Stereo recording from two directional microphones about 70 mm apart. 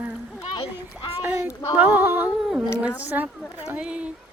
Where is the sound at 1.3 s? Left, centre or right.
Right.